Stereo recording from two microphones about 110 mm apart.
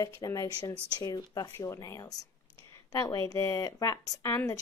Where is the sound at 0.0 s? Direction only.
30° left (ahead or behind).